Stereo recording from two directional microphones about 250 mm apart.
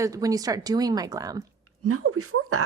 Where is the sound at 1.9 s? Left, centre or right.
Right.